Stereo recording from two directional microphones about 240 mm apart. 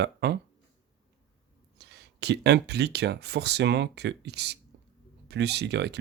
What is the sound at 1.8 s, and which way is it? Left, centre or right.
Speech, right.